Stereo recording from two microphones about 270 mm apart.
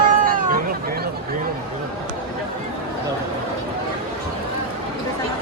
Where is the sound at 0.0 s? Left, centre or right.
Right.